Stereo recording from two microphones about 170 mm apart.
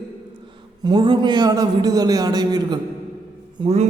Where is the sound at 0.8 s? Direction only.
30° right (ahead or behind).